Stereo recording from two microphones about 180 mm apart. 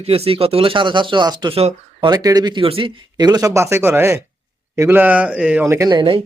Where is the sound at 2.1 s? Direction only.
20° right (ahead or behind).